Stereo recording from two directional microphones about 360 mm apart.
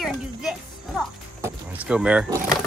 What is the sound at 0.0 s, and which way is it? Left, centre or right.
Music, centre.